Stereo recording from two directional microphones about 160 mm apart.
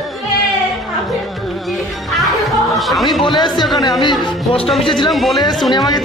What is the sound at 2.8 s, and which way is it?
Speech, centre (ahead or behind).